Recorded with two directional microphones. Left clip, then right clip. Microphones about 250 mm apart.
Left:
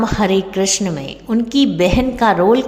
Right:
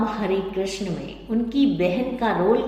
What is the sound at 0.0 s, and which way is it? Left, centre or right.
A woman's voice, left.